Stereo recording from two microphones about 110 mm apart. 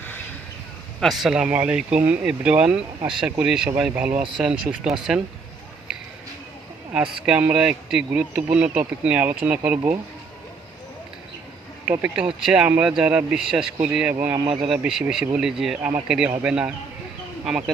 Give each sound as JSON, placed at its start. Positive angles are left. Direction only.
{"t": 0.9, "sound": "speech", "side_deg": 0}
{"t": 7.3, "sound": "speech", "side_deg": -10}
{"t": 11.9, "sound": "speech", "side_deg": -15}
{"t": 12.6, "sound": "speech", "side_deg": -15}
{"t": 14.5, "sound": "speech", "side_deg": -5}